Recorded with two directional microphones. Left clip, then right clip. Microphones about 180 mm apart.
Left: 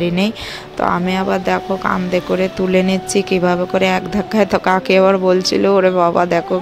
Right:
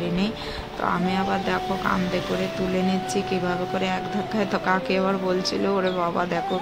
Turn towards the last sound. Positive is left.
turn(degrees=45)  # may be behind; listen again after turning